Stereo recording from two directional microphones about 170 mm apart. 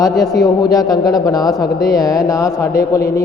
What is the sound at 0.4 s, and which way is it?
A man's voice, 20° left (ahead or behind).